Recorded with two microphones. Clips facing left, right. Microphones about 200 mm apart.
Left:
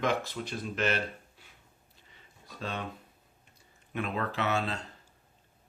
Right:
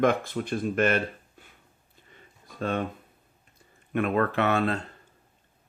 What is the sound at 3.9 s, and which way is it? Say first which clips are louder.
Speech: right 8 dB; 55° right (ahead or behind).